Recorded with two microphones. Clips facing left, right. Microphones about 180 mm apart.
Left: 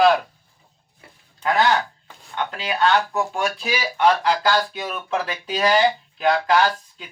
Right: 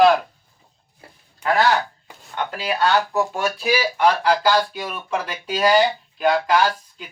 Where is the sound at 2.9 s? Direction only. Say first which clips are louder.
Right 1 dB; 5° right (ahead or behind).